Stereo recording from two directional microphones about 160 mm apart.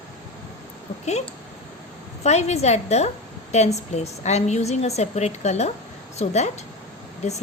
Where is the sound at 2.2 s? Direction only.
45° left (ahead or behind).